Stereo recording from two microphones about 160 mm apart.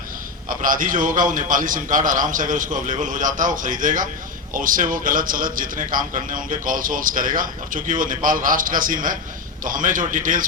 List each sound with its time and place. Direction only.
0.4 s a man's voice: 60° right (ahead or behind)